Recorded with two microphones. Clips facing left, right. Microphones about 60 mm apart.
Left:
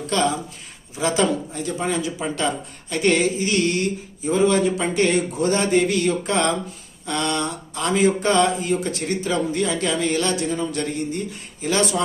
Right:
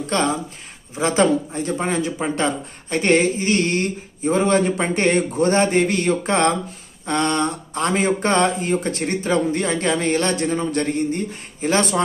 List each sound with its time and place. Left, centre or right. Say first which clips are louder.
0.1 s speech: even; right